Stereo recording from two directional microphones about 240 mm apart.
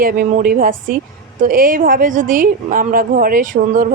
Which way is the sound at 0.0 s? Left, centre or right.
Right.